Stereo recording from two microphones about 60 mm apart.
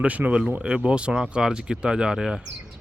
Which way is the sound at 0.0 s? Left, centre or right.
Right.